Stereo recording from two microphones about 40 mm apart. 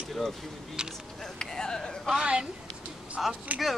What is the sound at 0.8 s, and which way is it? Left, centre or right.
Speech, right.